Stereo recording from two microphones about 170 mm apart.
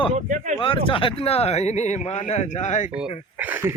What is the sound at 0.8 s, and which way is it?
A man's voice, 30° left (ahead or behind).